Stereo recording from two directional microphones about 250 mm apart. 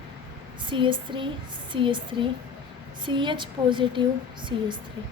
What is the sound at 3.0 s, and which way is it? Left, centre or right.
A woman's voice, centre.